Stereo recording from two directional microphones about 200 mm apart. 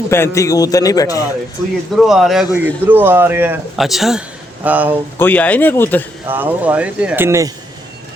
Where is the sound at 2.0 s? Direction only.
Centre (ahead or behind).